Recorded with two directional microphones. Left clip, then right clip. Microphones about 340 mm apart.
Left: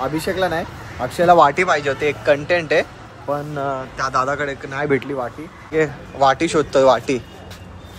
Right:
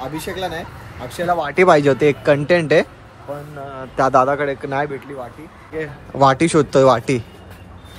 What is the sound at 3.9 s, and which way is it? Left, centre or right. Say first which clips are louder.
Speech: right 7 dB; centre.